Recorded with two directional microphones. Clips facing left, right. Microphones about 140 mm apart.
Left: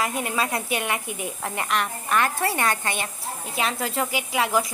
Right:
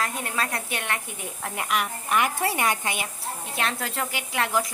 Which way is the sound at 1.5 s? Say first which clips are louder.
Even; 5° right (ahead or behind).